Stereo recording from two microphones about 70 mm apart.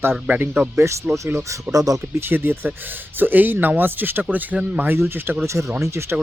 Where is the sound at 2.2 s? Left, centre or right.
Right.